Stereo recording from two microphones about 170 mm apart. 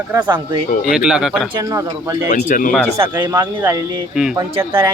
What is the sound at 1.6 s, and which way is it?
Speech, 20° right (ahead or behind).